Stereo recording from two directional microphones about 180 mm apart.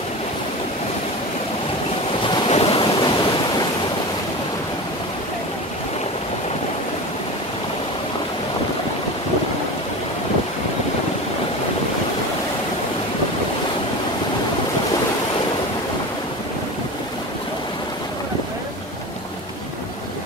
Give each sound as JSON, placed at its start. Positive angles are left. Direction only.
{"t": 2.2, "sound": "waves", "side_deg": 30}